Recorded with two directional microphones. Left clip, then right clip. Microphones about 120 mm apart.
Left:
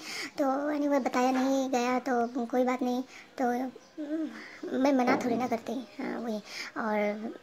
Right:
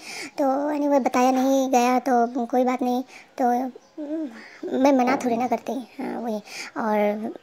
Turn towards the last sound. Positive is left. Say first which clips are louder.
# right 7 dB
turn(degrees=-40)  # may be behind; listen again after turning